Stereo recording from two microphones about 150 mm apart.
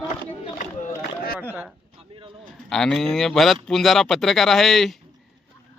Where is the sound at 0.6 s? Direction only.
70° left (ahead or behind).